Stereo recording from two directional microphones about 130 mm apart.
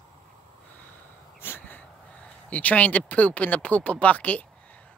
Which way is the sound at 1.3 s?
15° left (ahead or behind).